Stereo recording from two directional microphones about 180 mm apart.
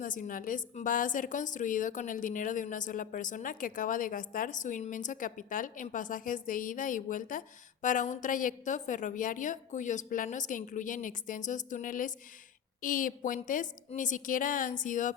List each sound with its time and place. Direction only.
0.0 s a woman's voice: 50° left (ahead or behind)